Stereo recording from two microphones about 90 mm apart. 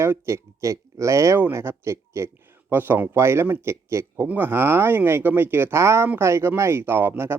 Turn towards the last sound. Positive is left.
turn(degrees=-25)  # may be behind; listen again after turning